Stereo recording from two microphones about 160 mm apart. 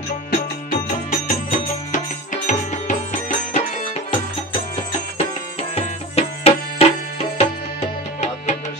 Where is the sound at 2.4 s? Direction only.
55° left (ahead or behind).